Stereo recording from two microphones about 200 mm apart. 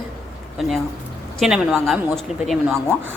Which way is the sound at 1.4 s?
Centre (ahead or behind).